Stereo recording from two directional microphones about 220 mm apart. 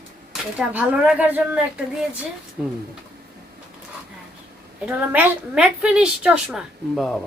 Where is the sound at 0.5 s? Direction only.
5° right (ahead or behind).